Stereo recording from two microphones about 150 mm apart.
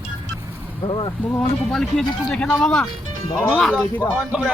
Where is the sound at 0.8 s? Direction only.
35° left (ahead or behind).